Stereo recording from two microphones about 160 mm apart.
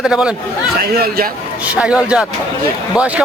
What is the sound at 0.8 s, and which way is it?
Speech, 75° right (ahead or behind).